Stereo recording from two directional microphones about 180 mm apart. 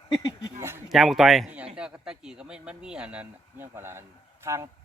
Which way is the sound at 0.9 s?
Centre (ahead or behind).